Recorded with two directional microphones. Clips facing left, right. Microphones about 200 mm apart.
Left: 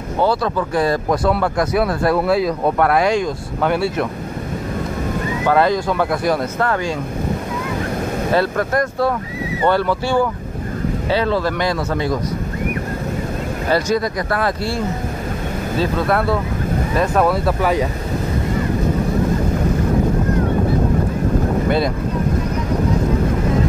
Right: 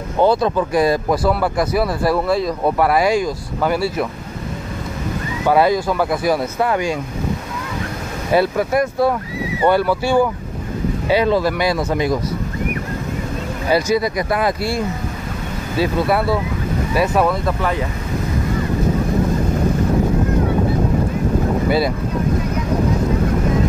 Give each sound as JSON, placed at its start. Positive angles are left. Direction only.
{"t": 0.2, "sound": "speech", "side_deg": -20}
{"t": 1.1, "sound": "speech", "side_deg": 0}
{"t": 5.5, "sound": "speech", "side_deg": -10}
{"t": 8.3, "sound": "speech", "side_deg": -10}
{"t": 13.7, "sound": "speech", "side_deg": -10}
{"t": 15.8, "sound": "speech", "side_deg": -5}
{"t": 17.3, "sound": "speech", "side_deg": 10}
{"t": 21.6, "sound": "speech", "side_deg": -5}